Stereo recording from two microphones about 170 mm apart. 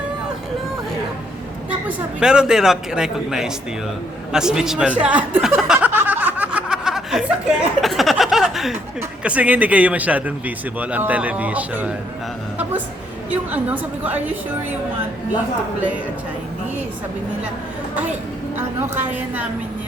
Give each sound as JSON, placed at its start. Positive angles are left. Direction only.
{"t": 2.2, "sound": "speech", "side_deg": -5}
{"t": 5.9, "sound": "snicker", "side_deg": -10}
{"t": 9.0, "sound": "speech", "side_deg": -10}
{"t": 13.3, "sound": "speech", "side_deg": -10}
{"t": 18.5, "sound": "speech", "side_deg": -10}